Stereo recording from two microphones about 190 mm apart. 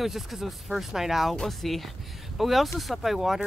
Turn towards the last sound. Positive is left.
turn(degrees=0)  # may be behind; listen again after turning